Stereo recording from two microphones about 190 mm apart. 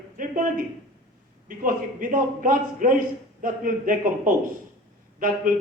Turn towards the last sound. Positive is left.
turn(degrees=-45)  # may be behind; listen again after turning